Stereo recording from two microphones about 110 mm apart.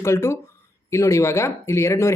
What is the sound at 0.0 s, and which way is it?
Speech, 25° left (ahead or behind).